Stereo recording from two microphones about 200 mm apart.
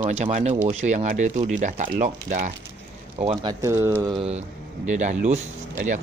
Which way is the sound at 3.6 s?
15° right (ahead or behind).